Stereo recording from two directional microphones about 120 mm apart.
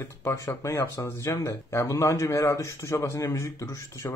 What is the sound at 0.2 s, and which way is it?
Speech, 25° left (ahead or behind).